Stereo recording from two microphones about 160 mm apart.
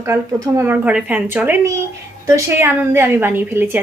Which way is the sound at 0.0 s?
20° right (ahead or behind).